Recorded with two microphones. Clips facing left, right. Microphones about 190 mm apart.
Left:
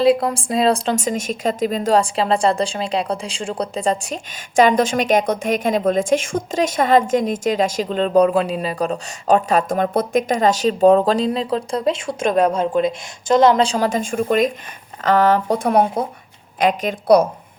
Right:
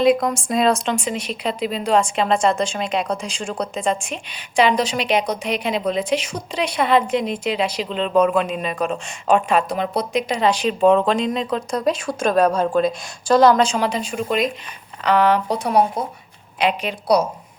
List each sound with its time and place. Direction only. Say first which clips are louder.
0.0 s a woman's voice: left 1 dB; 30° left (ahead or behind); by 17.2 s 50° left (ahead or behind)